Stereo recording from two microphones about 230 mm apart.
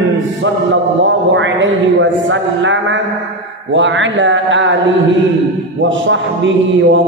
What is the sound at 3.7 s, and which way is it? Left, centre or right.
Mantra, right.